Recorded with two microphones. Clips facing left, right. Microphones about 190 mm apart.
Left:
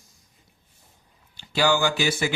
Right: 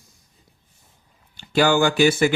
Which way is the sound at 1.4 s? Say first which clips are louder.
Right 4 dB; 55° right (ahead or behind).